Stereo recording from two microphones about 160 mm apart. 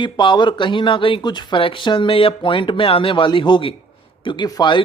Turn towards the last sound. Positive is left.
turn(degrees=30)  # may be behind; listen again after turning